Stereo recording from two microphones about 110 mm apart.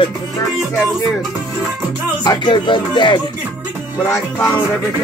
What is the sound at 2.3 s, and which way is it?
Music, 45° left (ahead or behind).